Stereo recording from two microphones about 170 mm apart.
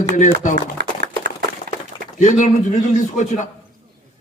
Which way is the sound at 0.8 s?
85° right.